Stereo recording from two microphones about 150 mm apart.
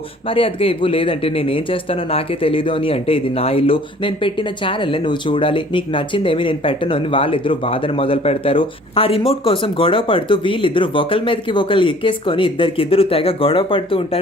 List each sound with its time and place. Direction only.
0.3 s speech: 40° left (ahead or behind)